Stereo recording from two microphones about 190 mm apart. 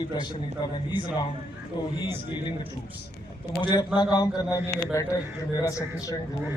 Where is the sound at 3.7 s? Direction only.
25° left (ahead or behind).